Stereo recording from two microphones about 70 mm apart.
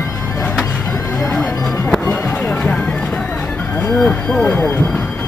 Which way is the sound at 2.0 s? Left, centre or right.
Left.